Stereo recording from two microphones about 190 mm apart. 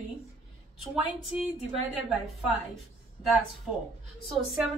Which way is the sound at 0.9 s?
5° right (ahead or behind).